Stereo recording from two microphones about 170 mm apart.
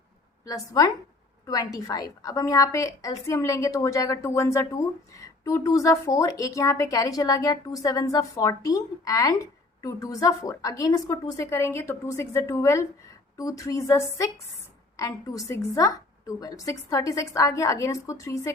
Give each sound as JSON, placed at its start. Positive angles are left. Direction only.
{"t": 0.4, "sound": "a woman's voice", "side_deg": 20}